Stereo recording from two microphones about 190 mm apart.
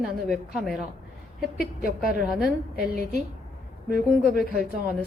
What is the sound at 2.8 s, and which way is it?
Speech, 50° left (ahead or behind).